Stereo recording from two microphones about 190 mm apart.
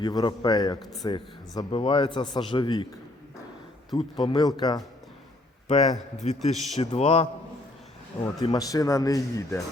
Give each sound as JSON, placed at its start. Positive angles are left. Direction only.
{"t": 0.0, "sound": "a man's voice", "side_deg": 20}
{"t": 3.9, "sound": "a man's voice", "side_deg": 20}
{"t": 5.6, "sound": "a man's voice", "side_deg": 35}
{"t": 8.5, "sound": "speech", "side_deg": 20}